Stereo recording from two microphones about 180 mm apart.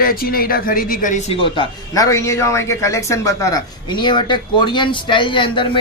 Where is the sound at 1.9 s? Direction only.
15° left (ahead or behind).